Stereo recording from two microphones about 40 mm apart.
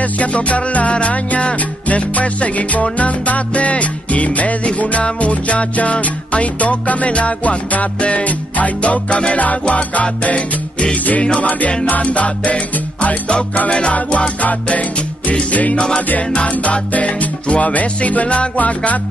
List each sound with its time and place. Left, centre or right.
0.0 s music: left